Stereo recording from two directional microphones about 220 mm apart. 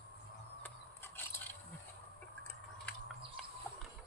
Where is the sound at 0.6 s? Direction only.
10° left (ahead or behind).